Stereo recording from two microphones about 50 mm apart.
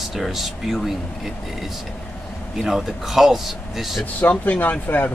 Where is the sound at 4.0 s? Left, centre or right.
Left.